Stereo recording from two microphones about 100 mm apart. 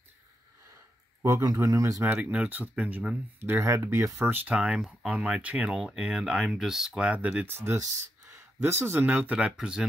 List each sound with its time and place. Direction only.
1.2 s speech: 30° right (ahead or behind)
2.1 s speech: 15° right (ahead or behind)
3.3 s speech: 25° right (ahead or behind)